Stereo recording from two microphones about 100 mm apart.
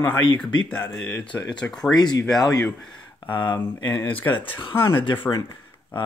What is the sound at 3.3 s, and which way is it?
Speech, 50° left (ahead or behind).